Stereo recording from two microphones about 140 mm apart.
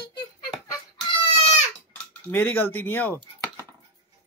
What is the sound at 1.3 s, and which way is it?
Goat, 45° left (ahead or behind).